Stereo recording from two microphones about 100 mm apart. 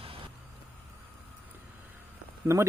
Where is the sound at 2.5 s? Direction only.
30° right (ahead or behind).